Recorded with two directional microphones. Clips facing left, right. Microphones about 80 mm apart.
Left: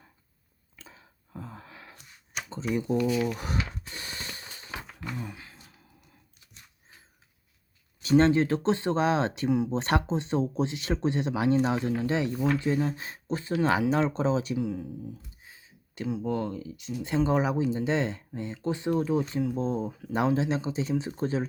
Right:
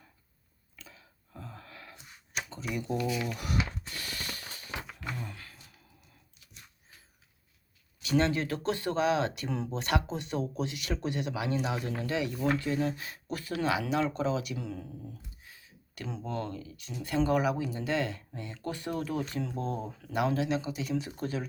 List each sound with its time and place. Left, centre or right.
0.8 s a sound: left
2.5 s speech: left
3.3 s mechanisms: left
5.2 s a sound: centre
8.0 s speech: left
14.5 s speech: centre
15.4 s a sound: left
16.0 s speech: centre
19.9 s speech: centre
20.1 s speech: left